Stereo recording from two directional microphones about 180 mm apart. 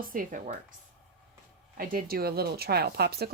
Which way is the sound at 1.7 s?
55° right (ahead or behind).